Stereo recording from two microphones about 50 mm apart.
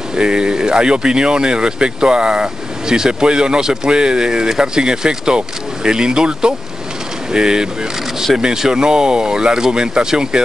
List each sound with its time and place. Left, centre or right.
0.1 s speech: centre